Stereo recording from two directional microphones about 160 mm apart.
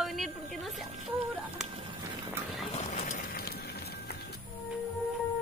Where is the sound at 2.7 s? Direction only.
50° left (ahead or behind); by 4.1 s 80° left.